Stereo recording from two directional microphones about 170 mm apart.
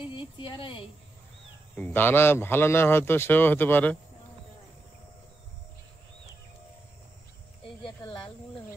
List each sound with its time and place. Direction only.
0.1 s speech: 30° left (ahead or behind)
1.8 s a man's voice: 10° left (ahead or behind)
7.6 s cricket: 30° left (ahead or behind)